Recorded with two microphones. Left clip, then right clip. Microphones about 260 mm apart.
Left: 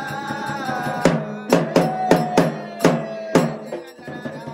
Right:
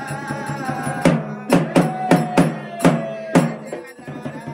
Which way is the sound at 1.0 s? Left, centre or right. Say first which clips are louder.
Right 2 dB; left.